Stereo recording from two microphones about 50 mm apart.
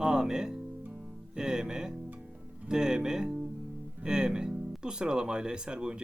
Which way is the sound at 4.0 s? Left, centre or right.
Centre.